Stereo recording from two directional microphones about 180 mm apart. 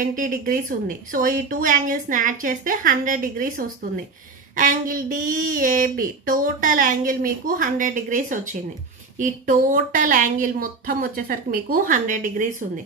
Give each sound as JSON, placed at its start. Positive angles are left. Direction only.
{"t": 0.0, "sound": "a woman's voice", "side_deg": -50}